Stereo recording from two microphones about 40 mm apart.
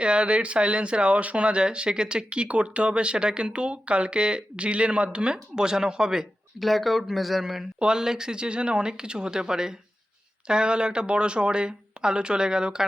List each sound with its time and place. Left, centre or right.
0.0 s speech: right
6.6 s speech: centre
7.8 s speech: centre